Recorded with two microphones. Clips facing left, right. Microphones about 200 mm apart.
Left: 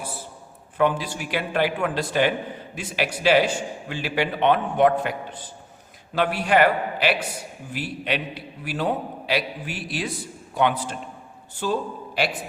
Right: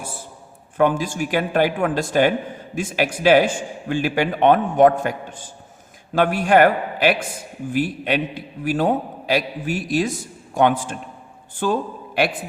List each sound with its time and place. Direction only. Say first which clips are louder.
0.8 s a man's voice: right 4 dB; 45° right (ahead or behind)